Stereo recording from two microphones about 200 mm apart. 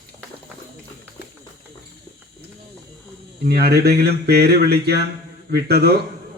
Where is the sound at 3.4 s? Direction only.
55° right (ahead or behind).